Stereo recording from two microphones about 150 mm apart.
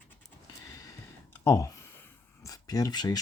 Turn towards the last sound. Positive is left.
turn(degrees=25)  # may be behind; listen again after turning